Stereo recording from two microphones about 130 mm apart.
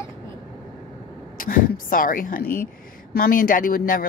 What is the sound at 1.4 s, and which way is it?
Speech, 90° left.